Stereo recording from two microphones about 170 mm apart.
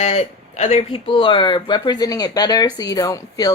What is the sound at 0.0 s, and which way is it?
Speech, 35° left (ahead or behind).